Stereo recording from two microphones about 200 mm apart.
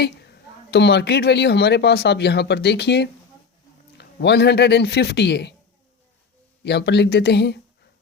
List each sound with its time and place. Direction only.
0.0 s speech: 55° left (ahead or behind)
6.7 s speech: 55° left (ahead or behind)